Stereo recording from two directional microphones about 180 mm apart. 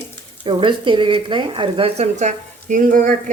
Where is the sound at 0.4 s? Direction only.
30° right (ahead or behind).